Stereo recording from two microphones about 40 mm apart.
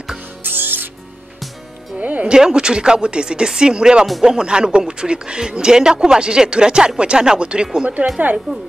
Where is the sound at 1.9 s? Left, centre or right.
Right.